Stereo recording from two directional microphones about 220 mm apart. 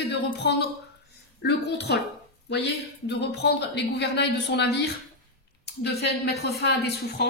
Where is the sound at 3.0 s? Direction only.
50° left (ahead or behind).